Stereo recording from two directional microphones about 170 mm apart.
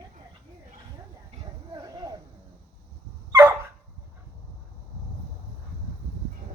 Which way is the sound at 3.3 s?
15° right (ahead or behind).